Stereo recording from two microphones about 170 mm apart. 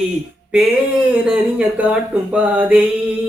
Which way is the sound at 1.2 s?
5° right (ahead or behind).